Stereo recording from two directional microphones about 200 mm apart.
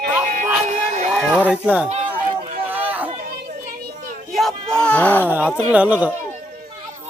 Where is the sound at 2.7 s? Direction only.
10° right (ahead or behind).